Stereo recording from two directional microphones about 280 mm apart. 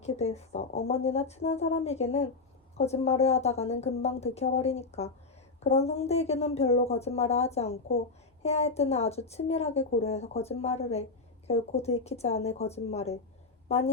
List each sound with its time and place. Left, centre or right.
0.0 s a woman's voice: left